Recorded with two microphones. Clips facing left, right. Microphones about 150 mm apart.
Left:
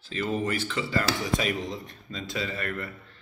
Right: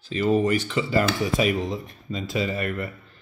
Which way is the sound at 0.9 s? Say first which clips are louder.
Right 5 dB; 10° right (ahead or behind).